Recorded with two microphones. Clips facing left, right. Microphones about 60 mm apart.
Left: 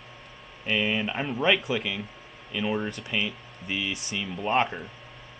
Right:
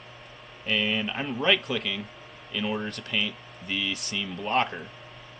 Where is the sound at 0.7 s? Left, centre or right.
Centre.